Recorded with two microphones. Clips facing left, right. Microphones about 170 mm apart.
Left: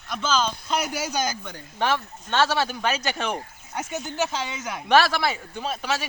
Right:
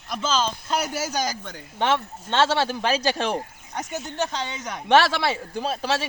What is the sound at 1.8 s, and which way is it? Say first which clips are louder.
Speech: right 2 dB; 20° right (ahead or behind).